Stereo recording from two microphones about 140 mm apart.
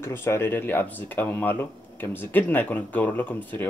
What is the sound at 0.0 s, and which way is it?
Speech, 20° left (ahead or behind).